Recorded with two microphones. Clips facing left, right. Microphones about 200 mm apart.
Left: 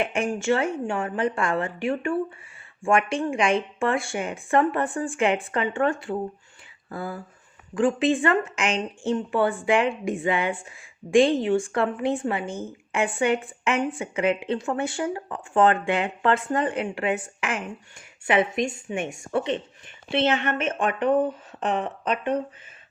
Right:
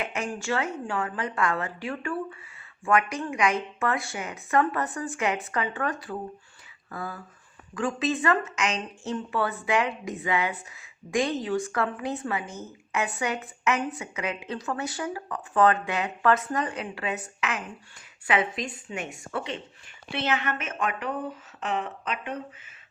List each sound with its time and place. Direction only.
0.0 s a woman's voice: 30° left (ahead or behind)
18.3 s a woman's voice: 25° left (ahead or behind)